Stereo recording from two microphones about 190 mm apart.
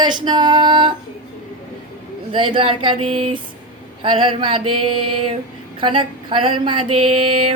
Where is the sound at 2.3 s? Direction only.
25° right (ahead or behind).